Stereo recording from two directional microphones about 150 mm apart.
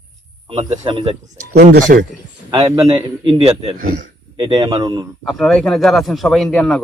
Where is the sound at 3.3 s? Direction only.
35° right (ahead or behind).